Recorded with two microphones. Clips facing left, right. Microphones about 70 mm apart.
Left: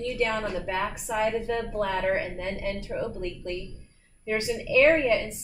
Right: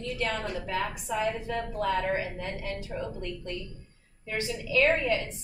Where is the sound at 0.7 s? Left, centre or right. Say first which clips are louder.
Left 2 dB; left.